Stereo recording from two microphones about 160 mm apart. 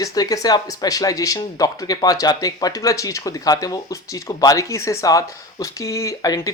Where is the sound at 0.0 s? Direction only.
25° left (ahead or behind).